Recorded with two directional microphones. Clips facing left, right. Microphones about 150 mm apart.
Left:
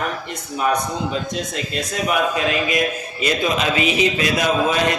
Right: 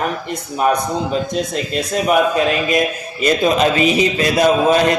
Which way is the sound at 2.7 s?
40° right (ahead or behind).